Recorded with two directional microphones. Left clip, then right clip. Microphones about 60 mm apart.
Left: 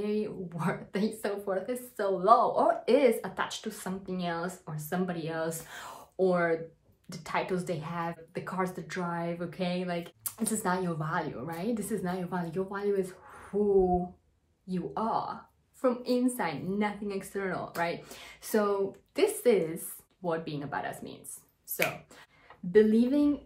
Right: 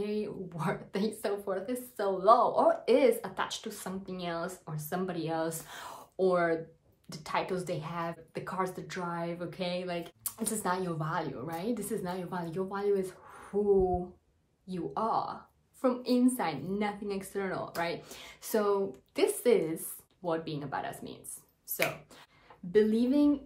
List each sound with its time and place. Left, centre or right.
0.0 s a woman's voice: right
4.7 s a woman's voice: right
14.7 s a woman's voice: right
22.7 s a woman's voice: right